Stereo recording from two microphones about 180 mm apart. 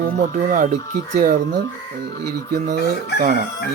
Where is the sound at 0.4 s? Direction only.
45° right (ahead or behind).